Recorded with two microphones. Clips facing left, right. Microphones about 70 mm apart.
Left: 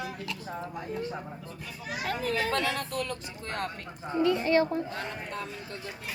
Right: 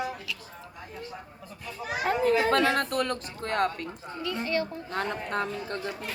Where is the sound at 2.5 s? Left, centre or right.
Right.